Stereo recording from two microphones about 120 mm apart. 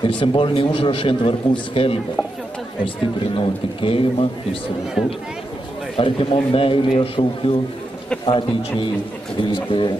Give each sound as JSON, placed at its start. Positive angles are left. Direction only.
{"t": 0.0, "sound": "a man's voice", "side_deg": 45}
{"t": 3.3, "sound": "a man's voice", "side_deg": 50}
{"t": 5.9, "sound": "a man's voice", "side_deg": 50}